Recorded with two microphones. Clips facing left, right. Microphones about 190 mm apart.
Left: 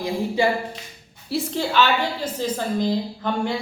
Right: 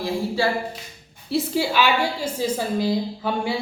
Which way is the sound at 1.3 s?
10° right (ahead or behind).